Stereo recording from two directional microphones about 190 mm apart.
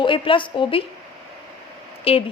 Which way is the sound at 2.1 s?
30° left (ahead or behind).